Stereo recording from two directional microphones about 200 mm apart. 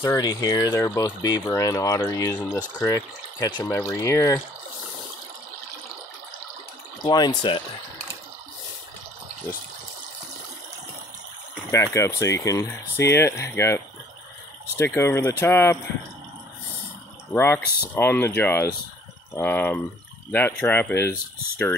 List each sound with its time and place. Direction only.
0.0 s speech: 15° left (ahead or behind)
7.1 s speech: 20° left (ahead or behind)
11.7 s speech: 15° left (ahead or behind)
14.9 s speech: 15° left (ahead or behind)
17.3 s speech: 10° left (ahead or behind)